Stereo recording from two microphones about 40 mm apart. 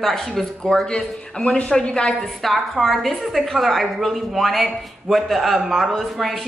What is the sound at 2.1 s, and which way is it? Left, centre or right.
A woman's voice, centre.